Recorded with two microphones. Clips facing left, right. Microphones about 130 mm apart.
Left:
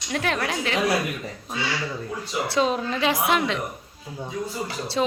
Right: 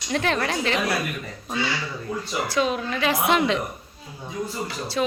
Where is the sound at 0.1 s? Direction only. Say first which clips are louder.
Right 2 dB; 5° left (ahead or behind).